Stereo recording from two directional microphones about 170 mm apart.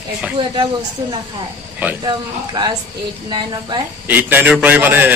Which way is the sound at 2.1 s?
25° right (ahead or behind).